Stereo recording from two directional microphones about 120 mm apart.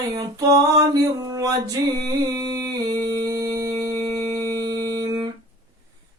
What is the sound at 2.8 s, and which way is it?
Music, 35° right (ahead or behind).